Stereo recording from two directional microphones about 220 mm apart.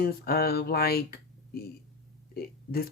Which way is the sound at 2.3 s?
45° left (ahead or behind).